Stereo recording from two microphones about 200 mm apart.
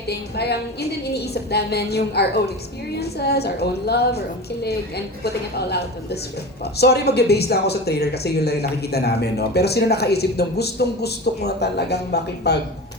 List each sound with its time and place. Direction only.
0.1 s speech: 55° left (ahead or behind)